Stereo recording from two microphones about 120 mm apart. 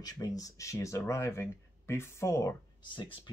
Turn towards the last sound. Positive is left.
turn(degrees=45)  # may be behind; listen again after turning